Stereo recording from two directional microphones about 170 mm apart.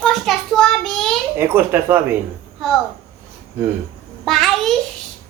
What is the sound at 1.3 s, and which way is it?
Speech, 15° right (ahead or behind).